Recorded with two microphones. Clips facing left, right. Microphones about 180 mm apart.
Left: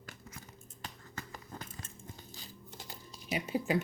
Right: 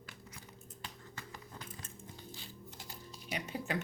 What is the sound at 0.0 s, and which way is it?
Music, 45° left (ahead or behind).